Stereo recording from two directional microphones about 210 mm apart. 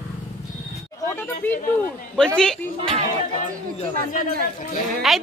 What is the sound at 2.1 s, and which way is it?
Speech, 5° left (ahead or behind).